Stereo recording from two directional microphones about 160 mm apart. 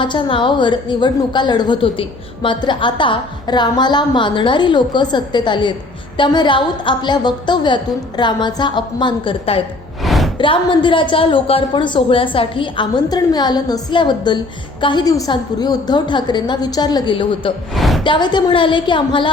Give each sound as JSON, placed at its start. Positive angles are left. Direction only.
{"t": 0.0, "sound": "a woman's voice", "side_deg": 30}
{"t": 10.0, "sound": "music", "side_deg": 0}
{"t": 10.3, "sound": "a woman's voice", "side_deg": 30}
{"t": 17.7, "sound": "a sound", "side_deg": 0}
{"t": 18.0, "sound": "a woman's voice", "side_deg": 30}